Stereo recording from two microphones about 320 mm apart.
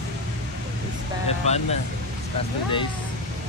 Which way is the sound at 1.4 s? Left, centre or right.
Centre.